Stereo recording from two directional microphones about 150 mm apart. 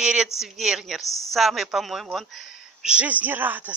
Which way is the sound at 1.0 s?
20° left (ahead or behind).